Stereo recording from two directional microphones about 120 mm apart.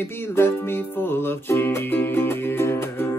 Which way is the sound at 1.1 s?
20° left (ahead or behind).